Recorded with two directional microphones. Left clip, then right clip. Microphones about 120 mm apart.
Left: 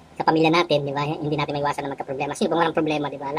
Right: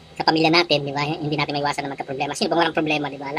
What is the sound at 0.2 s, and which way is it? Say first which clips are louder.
A woman's voice: right 1 dB; 5° left (ahead or behind).